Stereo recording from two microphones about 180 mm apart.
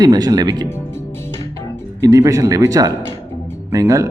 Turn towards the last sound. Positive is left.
turn(degrees=-15)  # may be behind; listen again after turning